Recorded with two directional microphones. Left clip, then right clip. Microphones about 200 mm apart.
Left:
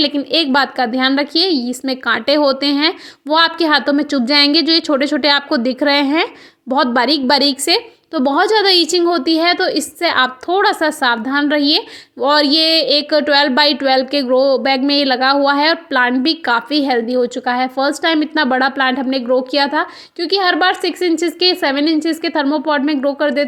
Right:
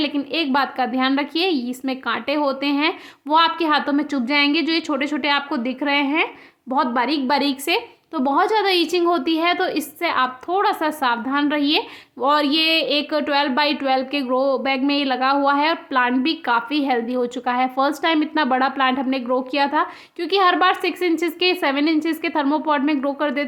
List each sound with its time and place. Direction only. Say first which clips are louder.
0.3 s speech: left 5 dB; 20° left (ahead or behind)